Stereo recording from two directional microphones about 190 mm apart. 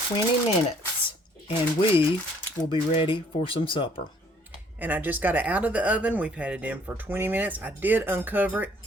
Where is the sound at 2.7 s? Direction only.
25° left (ahead or behind).